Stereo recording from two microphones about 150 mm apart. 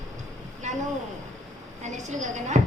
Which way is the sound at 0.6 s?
55° right (ahead or behind).